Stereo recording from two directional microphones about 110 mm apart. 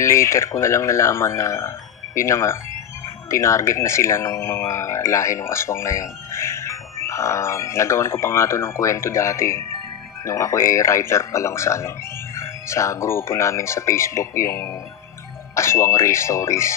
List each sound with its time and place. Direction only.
0.0 s speech: 25° left (ahead or behind)